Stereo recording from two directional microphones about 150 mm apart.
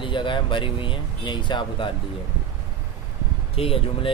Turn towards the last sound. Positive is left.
turn(degrees=40)  # may be behind; listen again after turning